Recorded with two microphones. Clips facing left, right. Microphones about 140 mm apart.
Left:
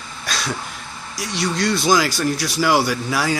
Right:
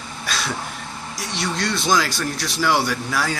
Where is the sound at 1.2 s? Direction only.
Centre (ahead or behind).